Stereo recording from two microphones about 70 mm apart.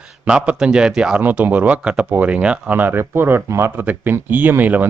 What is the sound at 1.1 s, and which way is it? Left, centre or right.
Speech, right.